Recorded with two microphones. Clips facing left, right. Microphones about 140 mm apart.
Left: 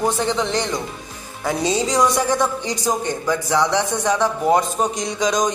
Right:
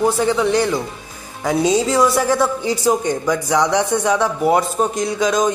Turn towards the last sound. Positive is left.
turn(degrees=-5)  # may be behind; listen again after turning